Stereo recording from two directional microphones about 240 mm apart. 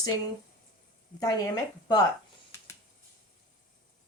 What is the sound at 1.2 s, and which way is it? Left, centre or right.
Speech, centre.